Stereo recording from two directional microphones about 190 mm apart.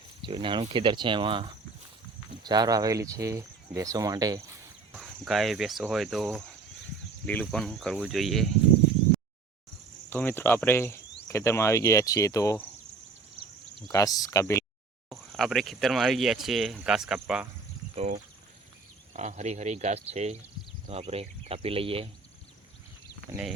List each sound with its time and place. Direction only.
0.2 s speech: 25° right (ahead or behind)
4.9 s speech: centre (ahead or behind)
7.4 s speech: 5° left (ahead or behind)
10.1 s cricket: 10° left (ahead or behind)
13.8 s cricket: 15° left (ahead or behind)
15.1 s speech: centre (ahead or behind)
19.1 s speech: 40° right (ahead or behind)
23.3 s speech: 5° right (ahead or behind)